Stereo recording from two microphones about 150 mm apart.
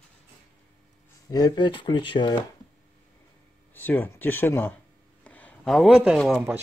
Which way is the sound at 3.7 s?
15° left (ahead or behind).